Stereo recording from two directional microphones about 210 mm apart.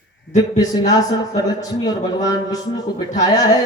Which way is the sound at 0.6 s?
20° left (ahead or behind).